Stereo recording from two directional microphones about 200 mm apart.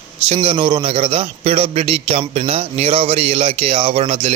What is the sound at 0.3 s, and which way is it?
A man's voice, 30° right (ahead or behind).